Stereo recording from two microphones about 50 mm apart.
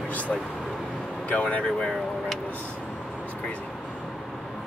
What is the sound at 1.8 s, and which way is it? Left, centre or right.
Speech, centre.